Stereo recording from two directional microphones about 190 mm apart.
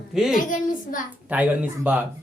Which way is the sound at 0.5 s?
45° left (ahead or behind).